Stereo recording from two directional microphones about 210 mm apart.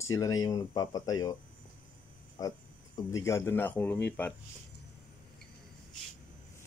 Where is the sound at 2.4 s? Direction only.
15° left (ahead or behind).